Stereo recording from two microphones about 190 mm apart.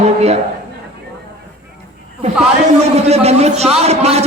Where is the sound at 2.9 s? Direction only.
35° right (ahead or behind).